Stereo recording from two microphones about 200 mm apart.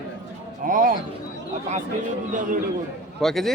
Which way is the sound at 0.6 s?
45° right (ahead or behind).